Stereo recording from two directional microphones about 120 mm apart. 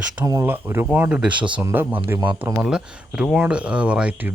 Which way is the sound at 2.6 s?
5° right (ahead or behind).